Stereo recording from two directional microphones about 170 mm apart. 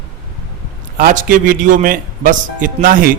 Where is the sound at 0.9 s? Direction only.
50° right (ahead or behind).